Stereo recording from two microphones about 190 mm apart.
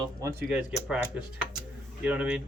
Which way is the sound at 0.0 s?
15° right (ahead or behind).